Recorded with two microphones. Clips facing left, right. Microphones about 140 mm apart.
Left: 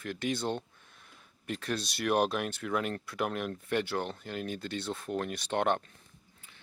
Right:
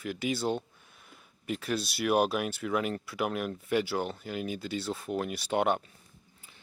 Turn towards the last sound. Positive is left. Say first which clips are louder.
# right 2 dB
turn(degrees=-5)  # may be behind; listen again after turning